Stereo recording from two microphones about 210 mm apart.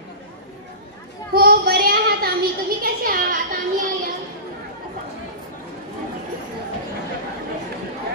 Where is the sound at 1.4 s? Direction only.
45° right (ahead or behind).